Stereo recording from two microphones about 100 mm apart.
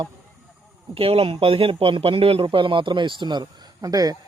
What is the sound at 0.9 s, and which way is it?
Speech, 70° right (ahead or behind).